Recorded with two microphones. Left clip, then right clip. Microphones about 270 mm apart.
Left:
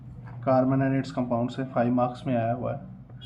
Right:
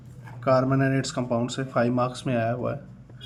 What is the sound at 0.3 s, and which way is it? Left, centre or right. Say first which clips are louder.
Speech: right 1 dB; right.